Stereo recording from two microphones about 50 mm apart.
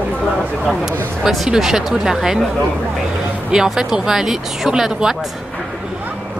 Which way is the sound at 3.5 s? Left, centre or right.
Centre.